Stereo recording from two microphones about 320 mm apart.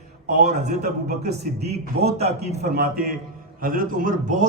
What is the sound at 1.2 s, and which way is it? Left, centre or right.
A man's voice, centre.